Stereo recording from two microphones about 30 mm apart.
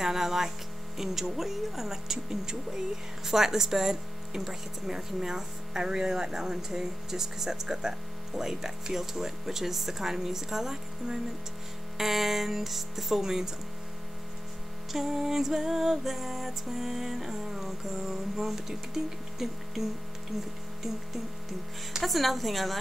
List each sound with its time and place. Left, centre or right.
0.0 s speech: centre
13.2 s speech: centre
14.9 s speech: centre
19.3 s mains hum: centre
22.0 s speech: centre